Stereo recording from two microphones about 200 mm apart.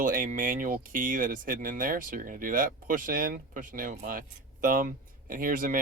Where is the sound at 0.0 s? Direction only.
40° right (ahead or behind).